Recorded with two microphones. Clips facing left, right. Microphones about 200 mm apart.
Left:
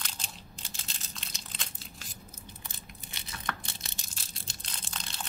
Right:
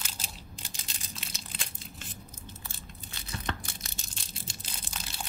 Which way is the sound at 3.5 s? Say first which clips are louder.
Right 2 dB; 20° right (ahead or behind).